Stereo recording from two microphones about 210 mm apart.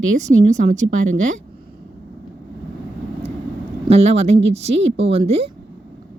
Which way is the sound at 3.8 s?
30° right (ahead or behind).